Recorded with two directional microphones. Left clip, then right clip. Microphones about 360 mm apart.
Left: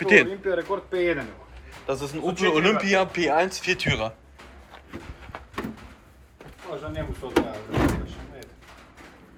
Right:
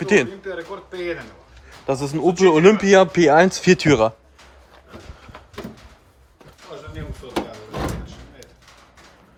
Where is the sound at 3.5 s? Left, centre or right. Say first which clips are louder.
Right 9 dB; centre.